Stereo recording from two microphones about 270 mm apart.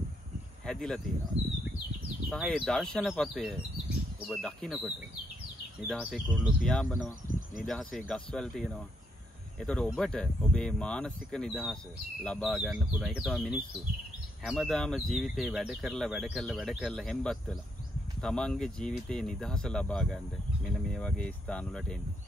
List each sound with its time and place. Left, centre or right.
0.7 s a sound: centre
2.2 s speech: centre
7.2 s bird: left
7.6 s speech: centre